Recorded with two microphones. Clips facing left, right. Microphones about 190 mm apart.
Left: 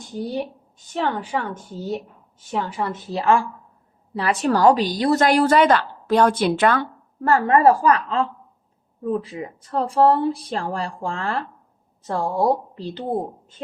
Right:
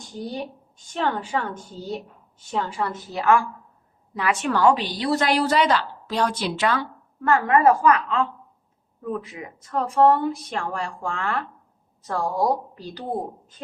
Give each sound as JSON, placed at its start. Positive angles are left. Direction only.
{"t": 0.9, "sound": "a woman's voice", "side_deg": 10}
{"t": 2.8, "sound": "a woman's voice", "side_deg": 30}
{"t": 7.2, "sound": "a woman's voice", "side_deg": 35}